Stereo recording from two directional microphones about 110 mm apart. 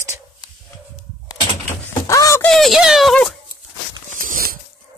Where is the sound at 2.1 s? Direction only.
30° left (ahead or behind).